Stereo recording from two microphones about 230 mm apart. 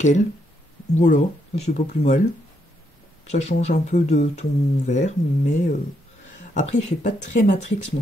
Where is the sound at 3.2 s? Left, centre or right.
Left.